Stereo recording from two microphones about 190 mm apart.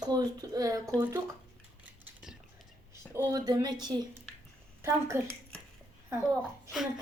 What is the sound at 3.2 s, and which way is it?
Speech, 15° right (ahead or behind).